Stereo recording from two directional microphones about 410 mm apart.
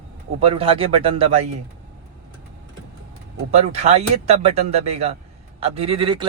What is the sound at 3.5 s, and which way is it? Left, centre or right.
Speech, centre.